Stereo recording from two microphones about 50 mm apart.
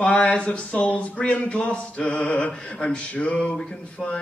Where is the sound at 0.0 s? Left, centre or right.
Left.